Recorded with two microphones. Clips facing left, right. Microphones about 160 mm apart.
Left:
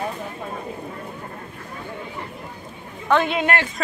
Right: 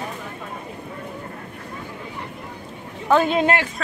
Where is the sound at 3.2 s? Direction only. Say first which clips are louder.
Right 3 dB; 35° right (ahead or behind).